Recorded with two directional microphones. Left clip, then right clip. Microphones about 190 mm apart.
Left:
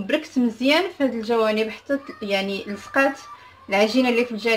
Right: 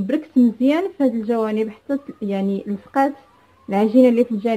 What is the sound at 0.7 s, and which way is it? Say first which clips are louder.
Speech: right 1 dB; 40° right (ahead or behind).